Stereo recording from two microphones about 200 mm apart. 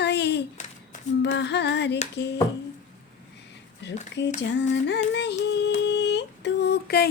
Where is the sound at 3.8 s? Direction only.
60° left (ahead or behind).